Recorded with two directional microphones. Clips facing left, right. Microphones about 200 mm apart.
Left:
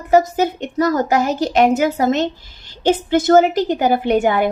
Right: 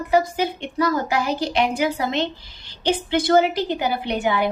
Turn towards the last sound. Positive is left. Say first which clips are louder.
# left 7 dB
turn(degrees=50)  # may be behind; listen again after turning